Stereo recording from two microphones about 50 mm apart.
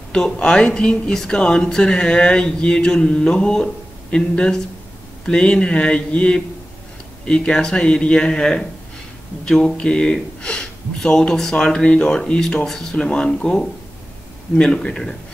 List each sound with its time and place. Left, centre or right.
0.1 s speech: centre